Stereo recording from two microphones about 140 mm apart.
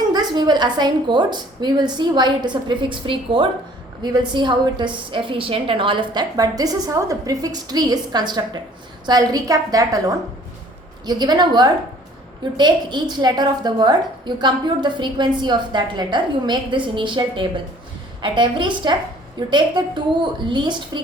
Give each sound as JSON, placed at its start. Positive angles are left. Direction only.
{"t": 0.1, "sound": "a woman's voice", "side_deg": -30}